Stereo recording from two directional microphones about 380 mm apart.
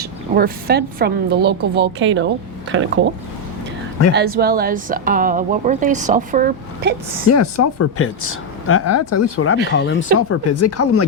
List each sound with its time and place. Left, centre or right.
0.0 s speech: right
4.1 s speech: right
7.3 s speech: left